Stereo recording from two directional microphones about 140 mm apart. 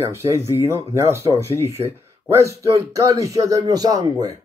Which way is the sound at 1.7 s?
20° right (ahead or behind).